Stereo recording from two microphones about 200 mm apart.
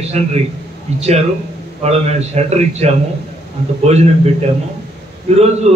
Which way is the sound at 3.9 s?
35° right (ahead or behind).